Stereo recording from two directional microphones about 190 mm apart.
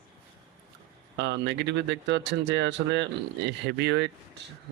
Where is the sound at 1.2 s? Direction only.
65° right (ahead or behind).